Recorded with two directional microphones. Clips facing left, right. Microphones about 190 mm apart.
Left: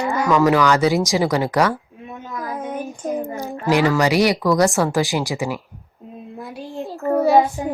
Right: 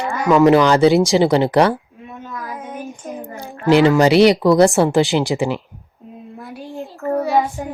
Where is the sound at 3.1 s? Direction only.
15° left (ahead or behind).